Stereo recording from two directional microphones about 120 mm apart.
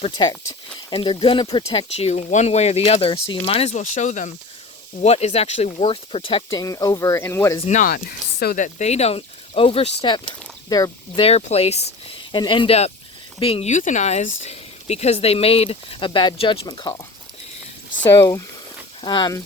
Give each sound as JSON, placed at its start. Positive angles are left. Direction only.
{"t": 0.2, "sound": "speech", "side_deg": 40}
{"t": 1.7, "sound": "speech", "side_deg": 60}
{"t": 3.7, "sound": "speech", "side_deg": 90}
{"t": 5.0, "sound": "speech", "side_deg": 60}
{"t": 5.9, "sound": "speech", "side_deg": 50}
{"t": 6.6, "sound": "speech", "side_deg": 30}
{"t": 8.5, "sound": "speech", "side_deg": 80}
{"t": 10.7, "sound": "speech", "side_deg": 30}
{"t": 11.1, "sound": "speech", "side_deg": 55}
{"t": 12.3, "sound": "speech", "side_deg": 40}
{"t": 13.7, "sound": "speech", "side_deg": 90}
{"t": 18.1, "sound": "speech", "side_deg": 25}
{"t": 19.0, "sound": "speech", "side_deg": 35}